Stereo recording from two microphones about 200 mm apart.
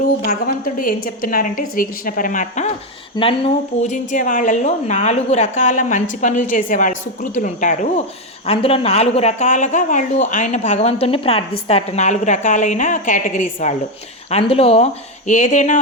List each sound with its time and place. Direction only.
0.3 s a woman's voice: 45° left (ahead or behind)
8.4 s speech: 30° left (ahead or behind)